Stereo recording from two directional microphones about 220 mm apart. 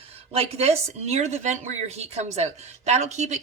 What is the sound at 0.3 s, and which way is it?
A woman's voice, 25° right (ahead or behind).